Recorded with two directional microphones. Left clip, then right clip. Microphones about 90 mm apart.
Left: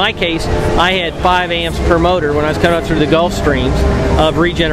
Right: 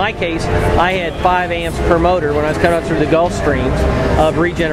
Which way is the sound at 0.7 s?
20° left (ahead or behind).